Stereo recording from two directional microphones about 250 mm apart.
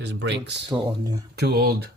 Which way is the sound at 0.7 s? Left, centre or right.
Centre.